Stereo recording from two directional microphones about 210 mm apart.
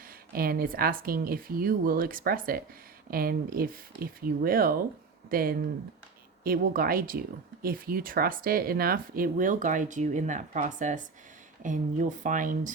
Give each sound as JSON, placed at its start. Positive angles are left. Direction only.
{"t": 0.3, "sound": "a woman's voice", "side_deg": -45}